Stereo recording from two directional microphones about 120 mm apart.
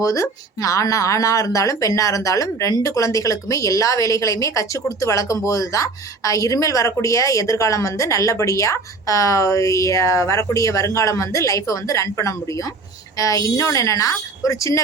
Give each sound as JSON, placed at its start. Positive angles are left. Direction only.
{"t": 0.0, "sound": "speech", "side_deg": 25}